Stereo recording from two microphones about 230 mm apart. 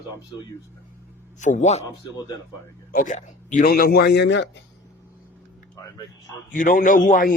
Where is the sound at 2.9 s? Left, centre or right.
Left.